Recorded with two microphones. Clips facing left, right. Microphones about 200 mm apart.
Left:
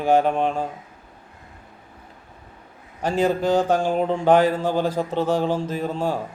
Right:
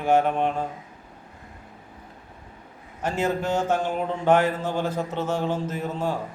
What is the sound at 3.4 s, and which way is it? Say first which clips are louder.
A man's voice: left 5 dB; 35° left (ahead or behind).